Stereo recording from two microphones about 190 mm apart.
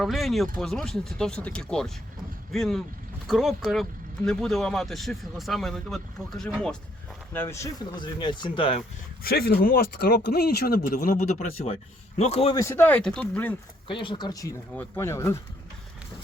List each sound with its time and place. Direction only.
0.0 s speech: centre (ahead or behind)
7.3 s speech: 15° left (ahead or behind)
9.2 s speech: 55° left (ahead or behind)
11.6 s speech: 35° left (ahead or behind)
12.5 s speech: 15° left (ahead or behind)
13.8 s speech: 25° left (ahead or behind)